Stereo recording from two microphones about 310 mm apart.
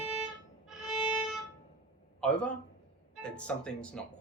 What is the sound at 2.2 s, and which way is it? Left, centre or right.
A man's voice, centre.